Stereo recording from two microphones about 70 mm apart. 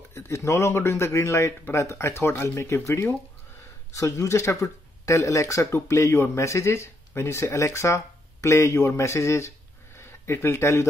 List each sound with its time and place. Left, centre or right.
0.1 s speech: left
3.9 s speech: left